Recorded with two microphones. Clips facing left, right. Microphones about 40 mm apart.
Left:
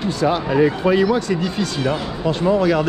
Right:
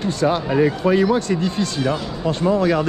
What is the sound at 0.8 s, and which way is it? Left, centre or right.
Speech, left.